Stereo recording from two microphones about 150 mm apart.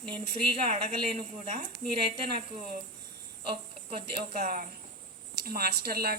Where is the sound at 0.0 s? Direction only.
35° right (ahead or behind).